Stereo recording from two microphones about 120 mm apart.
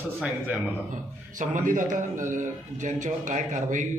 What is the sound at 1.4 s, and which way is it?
A man's voice, 90° right.